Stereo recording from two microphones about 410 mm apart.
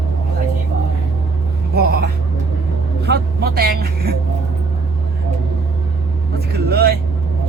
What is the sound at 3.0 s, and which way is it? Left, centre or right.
Music, right.